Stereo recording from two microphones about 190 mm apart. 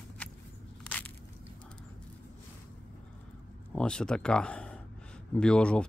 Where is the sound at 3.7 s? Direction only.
5° left (ahead or behind).